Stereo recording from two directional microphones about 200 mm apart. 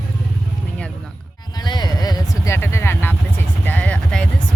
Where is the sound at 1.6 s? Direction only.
20° left (ahead or behind).